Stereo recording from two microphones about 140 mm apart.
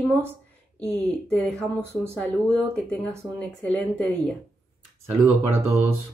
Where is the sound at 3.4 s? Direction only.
10° left (ahead or behind).